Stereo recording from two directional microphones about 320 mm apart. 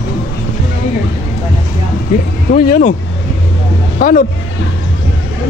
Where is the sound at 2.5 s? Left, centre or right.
Left.